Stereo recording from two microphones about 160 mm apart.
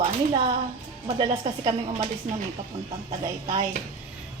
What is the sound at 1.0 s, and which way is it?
A woman's voice, 35° right (ahead or behind).